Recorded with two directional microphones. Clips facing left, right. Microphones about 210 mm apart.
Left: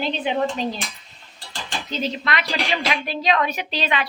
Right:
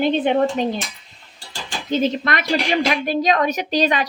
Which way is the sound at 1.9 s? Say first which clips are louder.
Right 7 dB; 50° right (ahead or behind).